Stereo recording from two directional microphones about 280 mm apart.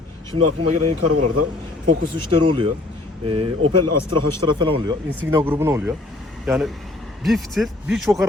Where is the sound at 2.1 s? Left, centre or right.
Centre.